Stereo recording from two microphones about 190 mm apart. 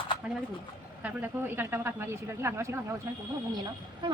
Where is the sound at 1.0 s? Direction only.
10° right (ahead or behind).